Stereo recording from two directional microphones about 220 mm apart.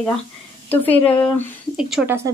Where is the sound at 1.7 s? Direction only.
5° right (ahead or behind).